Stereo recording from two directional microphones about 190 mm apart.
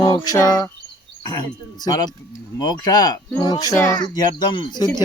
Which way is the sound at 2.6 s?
20° left (ahead or behind).